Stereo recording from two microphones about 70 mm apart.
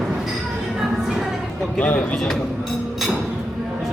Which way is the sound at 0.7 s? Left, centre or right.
Centre.